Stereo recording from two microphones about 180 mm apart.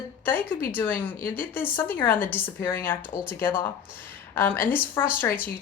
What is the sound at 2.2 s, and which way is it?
Speech, 10° left (ahead or behind).